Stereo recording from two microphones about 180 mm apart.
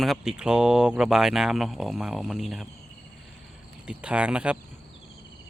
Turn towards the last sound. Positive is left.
turn(degrees=-5)  # may be behind; listen again after turning